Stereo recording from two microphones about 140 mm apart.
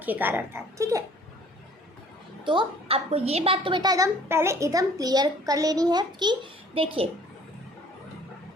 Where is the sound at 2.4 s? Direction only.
35° right (ahead or behind).